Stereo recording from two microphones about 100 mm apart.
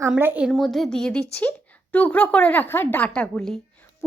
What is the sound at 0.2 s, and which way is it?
Speech, 20° right (ahead or behind).